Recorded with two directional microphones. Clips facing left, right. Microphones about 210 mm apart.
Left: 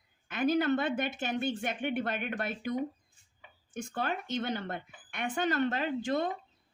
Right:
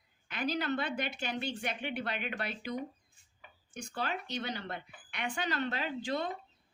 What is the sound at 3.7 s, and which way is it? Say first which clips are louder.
Speech: left 3 dB; 50° left (ahead or behind).